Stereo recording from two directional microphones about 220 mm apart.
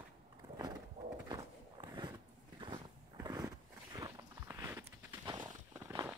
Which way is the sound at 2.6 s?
20° right (ahead or behind).